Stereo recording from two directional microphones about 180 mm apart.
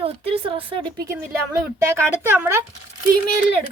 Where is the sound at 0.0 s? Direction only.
30° right (ahead or behind); by 2.6 s 10° right (ahead or behind).